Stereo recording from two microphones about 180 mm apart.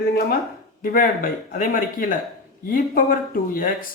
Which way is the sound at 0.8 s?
50° left (ahead or behind).